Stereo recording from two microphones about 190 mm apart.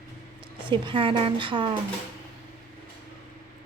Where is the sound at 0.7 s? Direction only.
25° right (ahead or behind).